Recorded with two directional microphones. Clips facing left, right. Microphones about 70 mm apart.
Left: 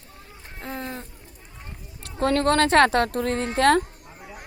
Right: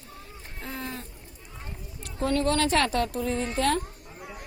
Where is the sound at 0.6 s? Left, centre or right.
Left.